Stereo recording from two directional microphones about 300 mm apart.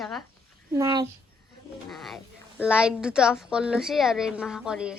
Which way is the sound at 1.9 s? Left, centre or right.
Centre.